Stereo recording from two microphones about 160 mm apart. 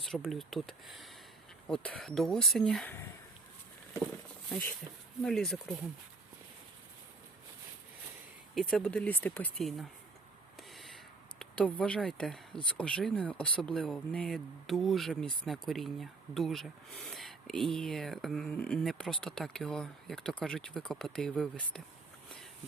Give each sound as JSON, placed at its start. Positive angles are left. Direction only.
{"t": 0.0, "sound": "speech", "side_deg": 0}
{"t": 5.2, "sound": "speech", "side_deg": 5}
{"t": 8.7, "sound": "speech", "side_deg": 5}
{"t": 10.6, "sound": "a sound", "side_deg": 0}
{"t": 12.6, "sound": "speech", "side_deg": 5}